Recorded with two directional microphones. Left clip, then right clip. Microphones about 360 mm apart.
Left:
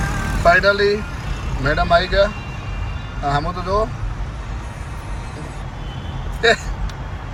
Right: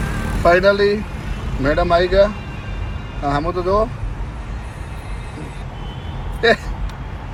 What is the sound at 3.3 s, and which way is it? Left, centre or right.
Speech, centre.